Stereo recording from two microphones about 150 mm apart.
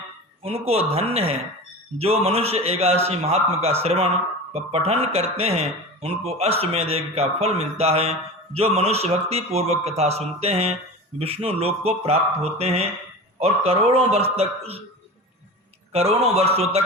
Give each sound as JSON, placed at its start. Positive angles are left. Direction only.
{"t": 0.4, "sound": "speech", "side_deg": -40}
{"t": 15.9, "sound": "speech", "side_deg": -45}